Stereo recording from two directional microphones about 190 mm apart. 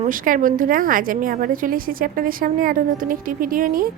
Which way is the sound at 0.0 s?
45° right (ahead or behind).